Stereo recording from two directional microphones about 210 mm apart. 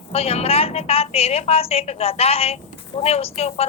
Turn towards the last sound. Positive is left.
turn(degrees=30)  # may be behind; listen again after turning